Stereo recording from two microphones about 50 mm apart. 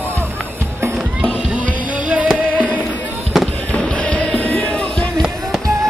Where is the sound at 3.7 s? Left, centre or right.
Left.